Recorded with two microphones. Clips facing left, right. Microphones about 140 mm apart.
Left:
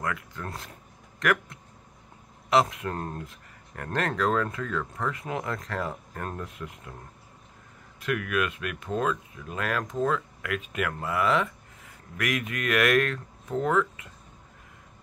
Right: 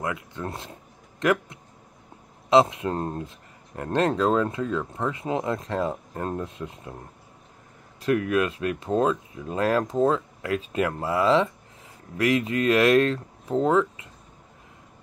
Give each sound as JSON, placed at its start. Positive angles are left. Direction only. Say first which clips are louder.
{"t": 0.0, "sound": "speech", "louder": "right 3 dB", "side_deg": -20}
{"t": 8.0, "sound": "speech", "louder": "right 6 dB", "side_deg": -30}